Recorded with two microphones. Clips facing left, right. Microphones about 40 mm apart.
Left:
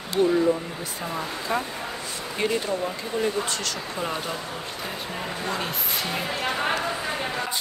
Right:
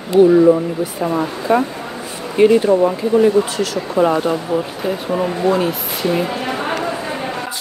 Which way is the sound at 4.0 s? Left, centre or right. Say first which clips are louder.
Right 17 dB; right.